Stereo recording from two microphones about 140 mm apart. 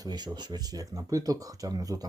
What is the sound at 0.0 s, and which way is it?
Speech, 30° right (ahead or behind).